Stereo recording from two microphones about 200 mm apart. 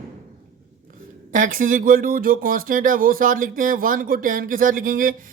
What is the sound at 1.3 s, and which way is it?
Speech, 40° right (ahead or behind).